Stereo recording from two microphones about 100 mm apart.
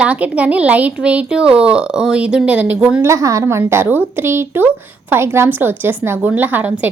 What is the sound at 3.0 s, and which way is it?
A woman's voice, 30° right (ahead or behind).